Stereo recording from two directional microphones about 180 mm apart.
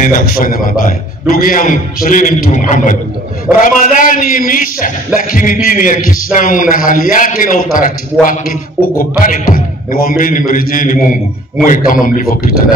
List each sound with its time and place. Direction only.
0.0 s a man's voice: 50° left (ahead or behind)